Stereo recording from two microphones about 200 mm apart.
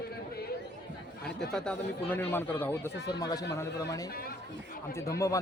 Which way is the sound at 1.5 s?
5° left (ahead or behind).